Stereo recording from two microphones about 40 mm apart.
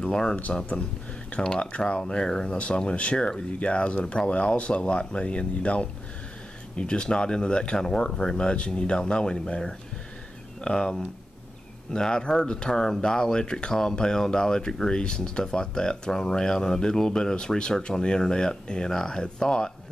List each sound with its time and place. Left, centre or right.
0.0 s speech: centre
1.3 s speech: left
1.9 s speech: left
10.6 s speech: centre